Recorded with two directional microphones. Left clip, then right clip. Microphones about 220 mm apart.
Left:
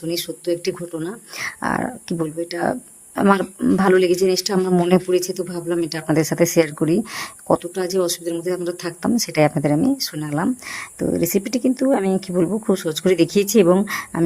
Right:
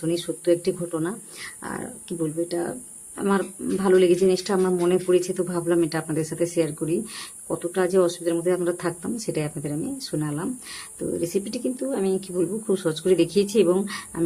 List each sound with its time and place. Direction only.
0.6 s speech: 40° left (ahead or behind)
5.5 s a man's voice: centre (ahead or behind)
5.8 s speech: 40° left (ahead or behind)
7.9 s a man's voice: centre (ahead or behind)
9.0 s speech: 40° left (ahead or behind)